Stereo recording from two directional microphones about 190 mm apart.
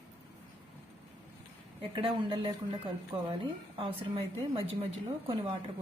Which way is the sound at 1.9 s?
25° right (ahead or behind).